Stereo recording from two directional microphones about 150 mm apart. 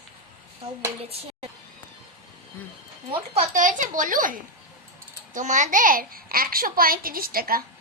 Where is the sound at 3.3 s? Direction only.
60° right (ahead or behind); by 7.6 s 75° right (ahead or behind).